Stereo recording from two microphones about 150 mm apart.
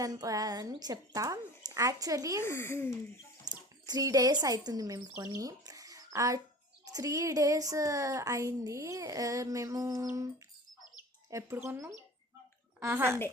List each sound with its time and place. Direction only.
0.0 s speech: 25° right (ahead or behind)
2.4 s speech: 15° left (ahead or behind)
3.4 s a child's voice: 25° right (ahead or behind)